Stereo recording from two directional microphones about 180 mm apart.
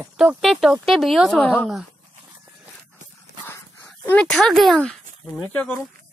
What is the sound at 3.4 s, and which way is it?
Dog, 10° left (ahead or behind).